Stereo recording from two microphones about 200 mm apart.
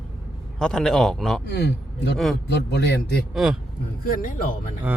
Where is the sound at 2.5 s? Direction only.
60° left (ahead or behind).